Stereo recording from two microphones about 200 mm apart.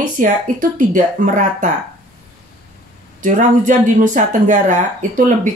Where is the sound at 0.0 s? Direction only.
40° right (ahead or behind).